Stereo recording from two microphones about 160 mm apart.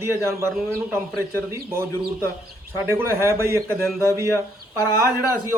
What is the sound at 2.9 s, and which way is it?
Speech, 15° right (ahead or behind).